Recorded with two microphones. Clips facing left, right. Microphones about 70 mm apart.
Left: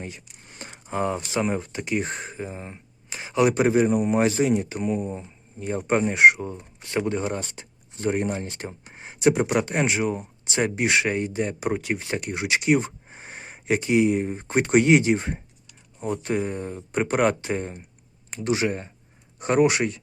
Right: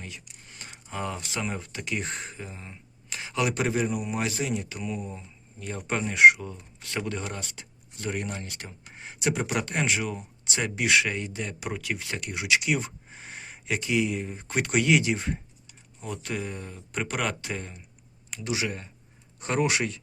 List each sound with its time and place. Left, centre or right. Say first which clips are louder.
0.6 s speech: left 7 dB; left